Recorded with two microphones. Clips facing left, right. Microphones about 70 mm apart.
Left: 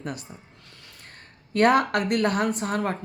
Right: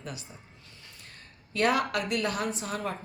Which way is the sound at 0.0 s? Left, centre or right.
Left.